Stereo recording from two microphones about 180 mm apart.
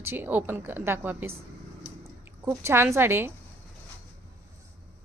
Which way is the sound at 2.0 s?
15° right (ahead or behind).